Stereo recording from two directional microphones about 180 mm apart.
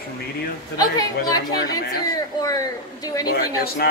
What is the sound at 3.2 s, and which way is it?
Speech, 55° left (ahead or behind).